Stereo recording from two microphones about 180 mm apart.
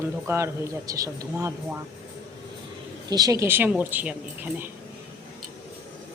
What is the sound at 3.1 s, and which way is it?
Speech, 20° right (ahead or behind).